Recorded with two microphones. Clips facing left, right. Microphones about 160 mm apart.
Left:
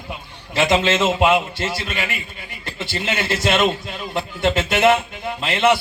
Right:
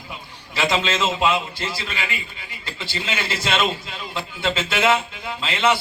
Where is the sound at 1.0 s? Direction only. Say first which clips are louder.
Left 4 dB; 60° left (ahead or behind).